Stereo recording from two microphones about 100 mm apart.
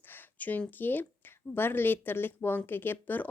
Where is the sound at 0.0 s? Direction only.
20° left (ahead or behind).